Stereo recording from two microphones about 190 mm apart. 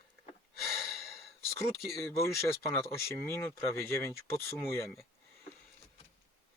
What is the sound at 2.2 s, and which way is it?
Speech, 15° left (ahead or behind).